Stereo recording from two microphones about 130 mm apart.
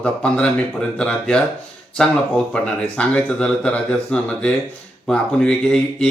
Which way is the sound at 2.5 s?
10° left (ahead or behind).